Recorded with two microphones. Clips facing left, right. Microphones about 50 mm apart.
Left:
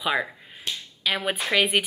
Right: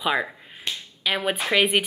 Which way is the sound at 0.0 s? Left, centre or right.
Centre.